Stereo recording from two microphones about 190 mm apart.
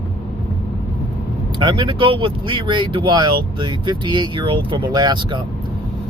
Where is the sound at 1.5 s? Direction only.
25° right (ahead or behind).